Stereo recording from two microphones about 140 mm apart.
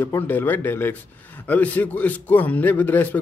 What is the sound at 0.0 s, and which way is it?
Speech, 15° left (ahead or behind).